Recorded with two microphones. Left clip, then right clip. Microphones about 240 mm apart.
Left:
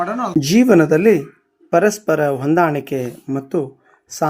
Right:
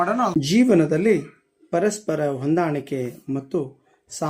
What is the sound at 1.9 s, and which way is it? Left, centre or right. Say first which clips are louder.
Speech: left 7 dB; centre.